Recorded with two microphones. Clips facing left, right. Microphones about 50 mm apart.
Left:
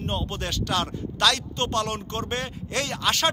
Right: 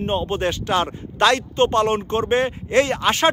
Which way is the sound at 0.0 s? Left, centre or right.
Right.